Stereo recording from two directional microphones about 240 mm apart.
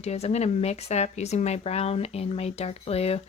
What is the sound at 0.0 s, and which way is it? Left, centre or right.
Speech, left.